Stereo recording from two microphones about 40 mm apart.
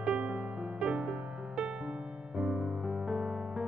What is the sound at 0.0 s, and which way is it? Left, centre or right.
Music, right.